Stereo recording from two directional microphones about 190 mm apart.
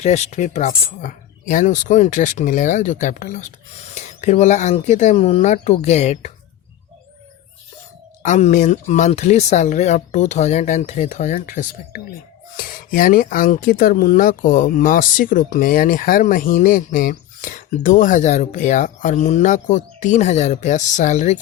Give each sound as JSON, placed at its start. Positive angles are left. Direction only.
{"t": 0.0, "sound": "speech", "side_deg": 35}
{"t": 8.2, "sound": "speech", "side_deg": 40}